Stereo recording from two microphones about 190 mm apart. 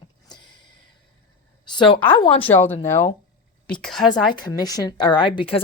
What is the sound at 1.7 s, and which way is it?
Speech, 25° left (ahead or behind).